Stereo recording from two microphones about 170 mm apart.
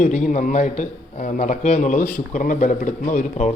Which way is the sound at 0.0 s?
45° left (ahead or behind).